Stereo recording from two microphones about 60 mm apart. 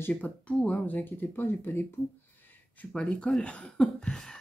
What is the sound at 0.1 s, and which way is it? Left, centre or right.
Speech, left.